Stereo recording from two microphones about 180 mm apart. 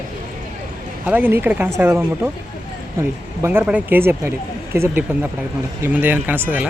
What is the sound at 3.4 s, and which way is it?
Speech, 10° right (ahead or behind).